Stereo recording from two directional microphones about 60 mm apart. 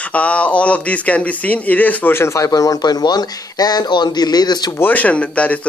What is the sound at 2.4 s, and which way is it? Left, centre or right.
Speech, left.